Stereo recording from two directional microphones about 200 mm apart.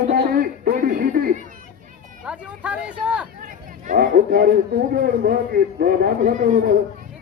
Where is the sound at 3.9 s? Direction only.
45° right (ahead or behind).